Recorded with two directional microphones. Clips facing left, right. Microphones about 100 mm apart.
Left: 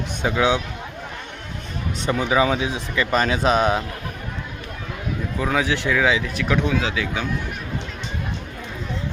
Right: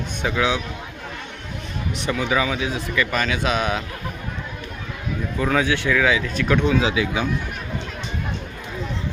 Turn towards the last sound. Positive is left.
turn(degrees=-10)  # may be behind; listen again after turning